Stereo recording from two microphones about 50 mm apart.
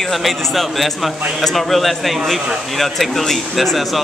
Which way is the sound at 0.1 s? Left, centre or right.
Centre.